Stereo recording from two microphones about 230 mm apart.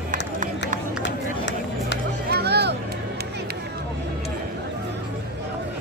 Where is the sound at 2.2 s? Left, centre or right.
Right.